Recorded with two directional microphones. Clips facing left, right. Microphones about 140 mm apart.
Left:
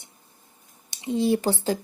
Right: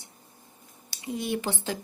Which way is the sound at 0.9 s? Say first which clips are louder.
Left 8 dB; 25° left (ahead or behind).